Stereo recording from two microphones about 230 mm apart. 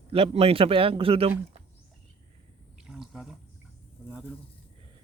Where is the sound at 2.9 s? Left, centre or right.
Centre.